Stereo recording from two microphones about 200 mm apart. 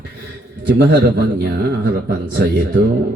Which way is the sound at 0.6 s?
55° right (ahead or behind).